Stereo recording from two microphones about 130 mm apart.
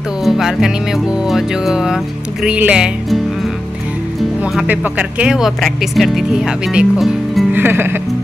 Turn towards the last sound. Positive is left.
turn(degrees=-15)  # may be behind; listen again after turning